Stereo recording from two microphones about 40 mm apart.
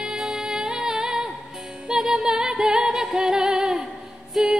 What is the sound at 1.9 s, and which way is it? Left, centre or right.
Music, centre.